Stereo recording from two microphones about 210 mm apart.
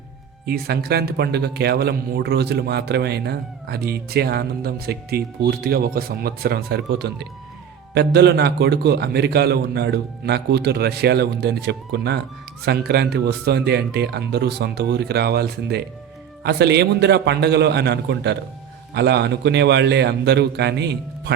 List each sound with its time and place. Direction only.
0.4 s speech: 50° right (ahead or behind)